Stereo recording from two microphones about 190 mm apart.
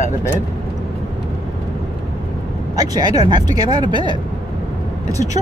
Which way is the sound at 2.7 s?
20° right (ahead or behind).